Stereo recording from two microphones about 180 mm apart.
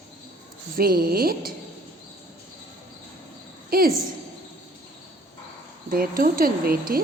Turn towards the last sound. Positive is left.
turn(degrees=-55)  # may be behind; listen again after turning